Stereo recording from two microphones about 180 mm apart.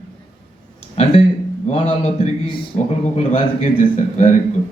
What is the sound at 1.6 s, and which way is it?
A man's voice, 40° left (ahead or behind).